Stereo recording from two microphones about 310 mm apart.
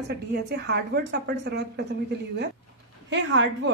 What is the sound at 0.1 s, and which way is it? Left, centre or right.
A woman's voice, right.